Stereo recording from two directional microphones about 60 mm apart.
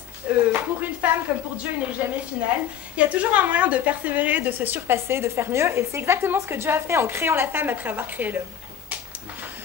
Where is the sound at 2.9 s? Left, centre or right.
Right.